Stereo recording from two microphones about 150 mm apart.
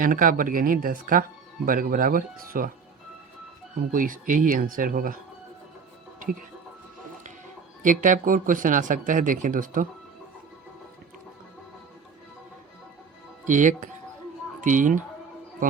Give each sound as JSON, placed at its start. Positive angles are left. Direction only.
{"t": 0.0, "sound": "speech", "side_deg": -65}
{"t": 3.9, "sound": "speech", "side_deg": -65}
{"t": 7.8, "sound": "speech", "side_deg": -60}
{"t": 13.4, "sound": "speech", "side_deg": -55}